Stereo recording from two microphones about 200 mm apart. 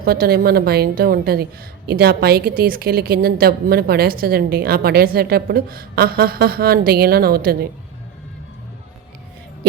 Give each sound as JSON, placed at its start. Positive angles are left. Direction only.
{"t": 0.0, "sound": "a woman's voice", "side_deg": -50}